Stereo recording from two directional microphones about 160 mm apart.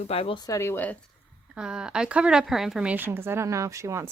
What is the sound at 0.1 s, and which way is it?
Speech, 35° left (ahead or behind).